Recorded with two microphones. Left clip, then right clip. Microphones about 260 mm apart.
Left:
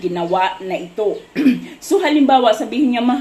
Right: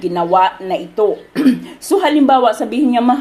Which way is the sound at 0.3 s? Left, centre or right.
Right.